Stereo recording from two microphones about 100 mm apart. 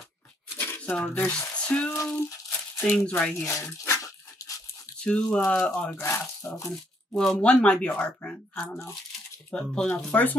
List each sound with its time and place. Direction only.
0.6 s shuffling cards: 20° left (ahead or behind)
1.1 s speech: 25° left (ahead or behind)
1.6 s frying: 10° left (ahead or behind)
2.1 s crumpling: 20° left (ahead or behind)
3.1 s speech: 10° left (ahead or behind)
3.4 s speech: 30° left (ahead or behind)
4.4 s dog: 35° left (ahead or behind)
5.0 s speech: 10° left (ahead or behind)
5.9 s speech: 25° left (ahead or behind)
7.2 s speech: 10° left (ahead or behind)